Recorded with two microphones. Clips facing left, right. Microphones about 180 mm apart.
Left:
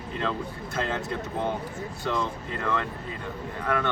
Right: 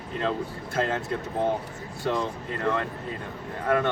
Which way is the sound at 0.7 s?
45° right (ahead or behind).